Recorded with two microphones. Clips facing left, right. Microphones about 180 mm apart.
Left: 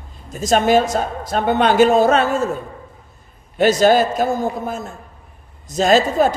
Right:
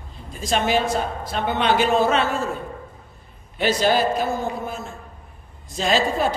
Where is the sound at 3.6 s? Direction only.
45° left (ahead or behind).